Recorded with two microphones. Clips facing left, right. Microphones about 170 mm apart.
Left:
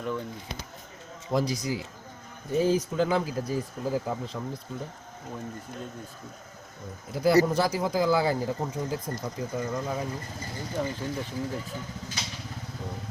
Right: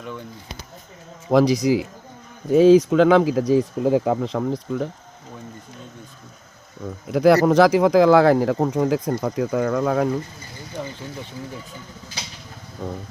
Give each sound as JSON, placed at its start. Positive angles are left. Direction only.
{"t": 1.3, "sound": "speech", "side_deg": -80}
{"t": 7.1, "sound": "speech", "side_deg": -90}
{"t": 12.8, "sound": "vehicle", "side_deg": -70}